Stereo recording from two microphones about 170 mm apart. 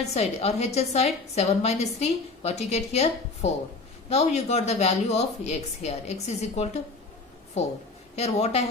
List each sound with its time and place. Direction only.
0.0 s a woman's voice: 40° left (ahead or behind)
8.1 s a woman's voice: 40° left (ahead or behind)